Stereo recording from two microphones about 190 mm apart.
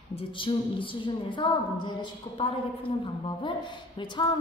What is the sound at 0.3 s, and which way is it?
A woman's voice, 25° left (ahead or behind).